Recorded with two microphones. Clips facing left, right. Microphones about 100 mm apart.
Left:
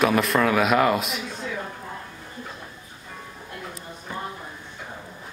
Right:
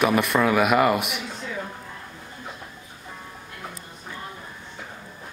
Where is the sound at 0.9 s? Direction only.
65° right (ahead or behind).